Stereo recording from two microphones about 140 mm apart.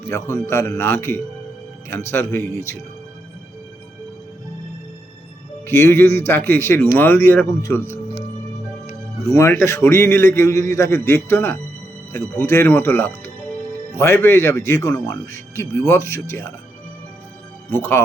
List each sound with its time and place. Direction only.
0.1 s a man's voice: 20° left (ahead or behind)
5.6 s a man's voice: 15° left (ahead or behind)
9.3 s a man's voice: 20° left (ahead or behind)
17.7 s a man's voice: 15° left (ahead or behind)